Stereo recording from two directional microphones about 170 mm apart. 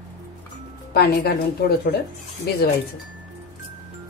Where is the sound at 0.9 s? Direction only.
70° left (ahead or behind).